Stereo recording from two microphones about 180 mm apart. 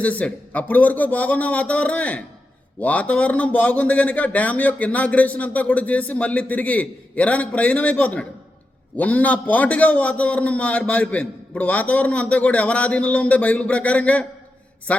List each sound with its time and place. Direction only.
0.0 s a man's voice: 5° left (ahead or behind)